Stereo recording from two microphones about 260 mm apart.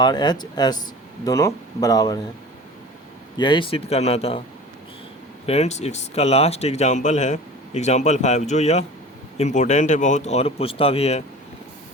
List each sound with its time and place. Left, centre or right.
0.0 s speech: centre
3.3 s speech: centre
5.5 s speech: left